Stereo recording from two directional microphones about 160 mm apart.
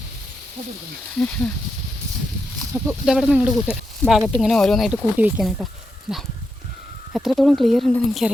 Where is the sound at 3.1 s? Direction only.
5° right (ahead or behind).